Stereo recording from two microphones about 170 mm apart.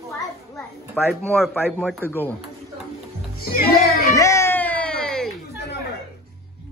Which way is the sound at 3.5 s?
60° left (ahead or behind).